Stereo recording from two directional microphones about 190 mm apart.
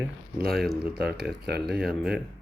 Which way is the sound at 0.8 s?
55° right (ahead or behind).